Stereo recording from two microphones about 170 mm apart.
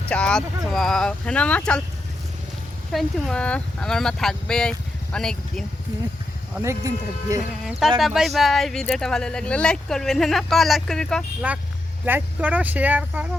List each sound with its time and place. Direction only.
0.1 s speech: 5° left (ahead or behind)
2.9 s speech: centre (ahead or behind)
6.6 s speech: 20° right (ahead or behind)
7.6 s speech: centre (ahead or behind)
11.4 s speech: 10° right (ahead or behind)